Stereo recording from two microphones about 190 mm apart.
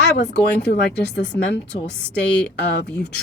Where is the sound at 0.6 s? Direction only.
65° left (ahead or behind).